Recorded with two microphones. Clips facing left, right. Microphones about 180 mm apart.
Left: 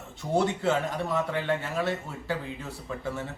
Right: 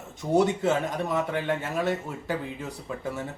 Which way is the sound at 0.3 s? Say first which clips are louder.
Right 3 dB; 20° right (ahead or behind).